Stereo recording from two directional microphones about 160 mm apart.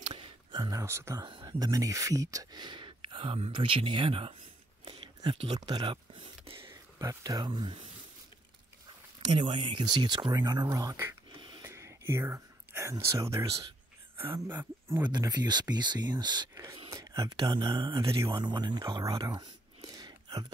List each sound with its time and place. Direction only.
0.1 s a sound: 25° right (ahead or behind)
1.3 s speech: 30° right (ahead or behind)
4.8 s a sound: 35° right (ahead or behind)
7.0 s speech: 20° right (ahead or behind)
9.3 s speech: 35° right (ahead or behind)
11.6 s whispering: 15° right (ahead or behind)
14.1 s speech: 15° right (ahead or behind)
15.0 s speech: 25° right (ahead or behind)